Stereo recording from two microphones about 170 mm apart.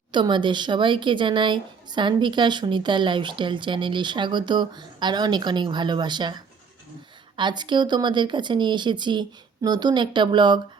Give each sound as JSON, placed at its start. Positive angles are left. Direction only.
{"t": 0.1, "sound": "speech", "side_deg": -25}